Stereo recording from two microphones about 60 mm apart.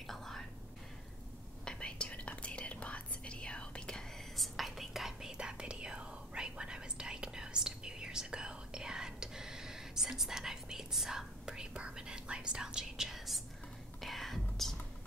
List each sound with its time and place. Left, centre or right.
0.0 s whispering: centre
1.6 s whispering: centre
4.4 s whispering: centre